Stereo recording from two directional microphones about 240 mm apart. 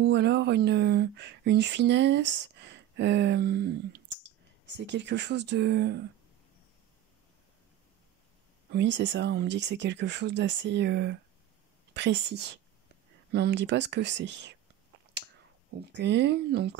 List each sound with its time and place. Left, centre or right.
0.0 s speech: right
8.7 s speech: right
15.8 s speech: right